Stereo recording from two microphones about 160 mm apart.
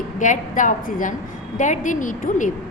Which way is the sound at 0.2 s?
55° left (ahead or behind).